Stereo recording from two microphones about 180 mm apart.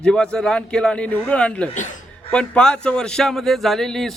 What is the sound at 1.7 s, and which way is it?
Speech, 45° left (ahead or behind).